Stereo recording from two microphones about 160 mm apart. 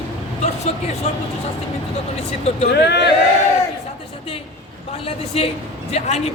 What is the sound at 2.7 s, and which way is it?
Speech, 90° left.